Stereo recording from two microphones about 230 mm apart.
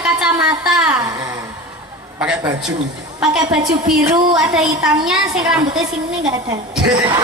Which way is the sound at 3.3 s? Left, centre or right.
Centre.